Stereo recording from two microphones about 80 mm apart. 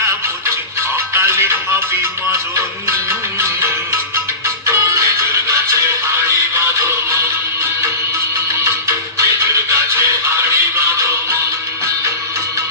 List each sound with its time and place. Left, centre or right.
1.1 s music: right
3.1 s music: right
6.7 s music: right
8.6 s music: right